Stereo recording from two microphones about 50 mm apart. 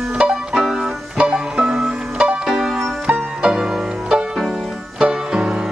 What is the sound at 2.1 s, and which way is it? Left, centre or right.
Music, right.